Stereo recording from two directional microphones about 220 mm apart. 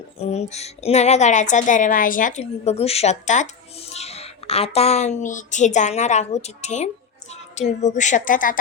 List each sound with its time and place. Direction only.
0.2 s speech: 30° left (ahead or behind)